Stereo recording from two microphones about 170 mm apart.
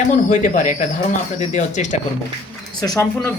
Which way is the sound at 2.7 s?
20° left (ahead or behind).